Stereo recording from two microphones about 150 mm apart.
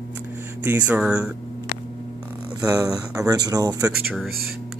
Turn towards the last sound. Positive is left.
turn(degrees=0)  # may be behind; listen again after turning